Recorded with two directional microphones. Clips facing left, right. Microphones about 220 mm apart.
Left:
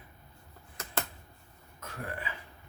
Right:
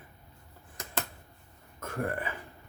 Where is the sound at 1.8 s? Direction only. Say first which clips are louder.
Right 7 dB; 50° right (ahead or behind).